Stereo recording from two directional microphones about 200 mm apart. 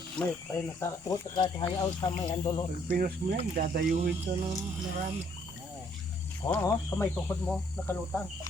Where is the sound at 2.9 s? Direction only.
45° right (ahead or behind).